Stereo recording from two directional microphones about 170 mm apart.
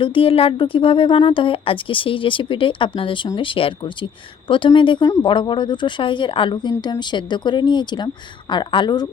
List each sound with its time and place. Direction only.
0.0 s speech: 30° left (ahead or behind)